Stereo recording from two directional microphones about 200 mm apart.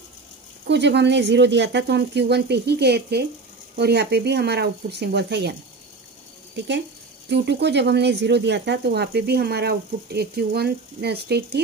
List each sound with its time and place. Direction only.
0.7 s speech: 60° right (ahead or behind)
7.2 s speech: 60° right (ahead or behind)